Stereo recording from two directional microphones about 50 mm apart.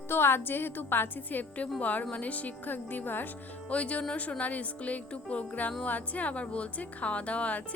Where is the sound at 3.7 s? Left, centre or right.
Left.